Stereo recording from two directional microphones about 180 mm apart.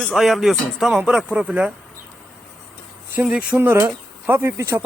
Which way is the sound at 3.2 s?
5° right (ahead or behind).